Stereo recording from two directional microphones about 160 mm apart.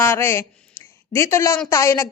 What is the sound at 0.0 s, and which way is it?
A woman's voice, 15° left (ahead or behind).